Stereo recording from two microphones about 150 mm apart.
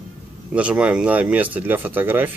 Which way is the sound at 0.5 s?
10° right (ahead or behind).